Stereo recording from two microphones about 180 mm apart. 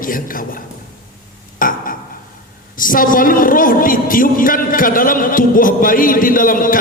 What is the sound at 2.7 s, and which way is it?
A woman's voice, 50° left (ahead or behind).